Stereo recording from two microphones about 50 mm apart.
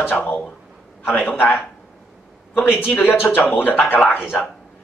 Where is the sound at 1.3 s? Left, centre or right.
Left.